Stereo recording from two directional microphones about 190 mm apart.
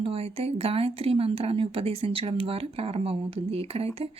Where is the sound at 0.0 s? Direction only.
30° right (ahead or behind).